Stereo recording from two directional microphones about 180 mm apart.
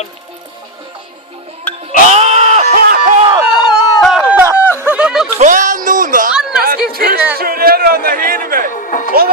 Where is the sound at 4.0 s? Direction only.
Centre (ahead or behind).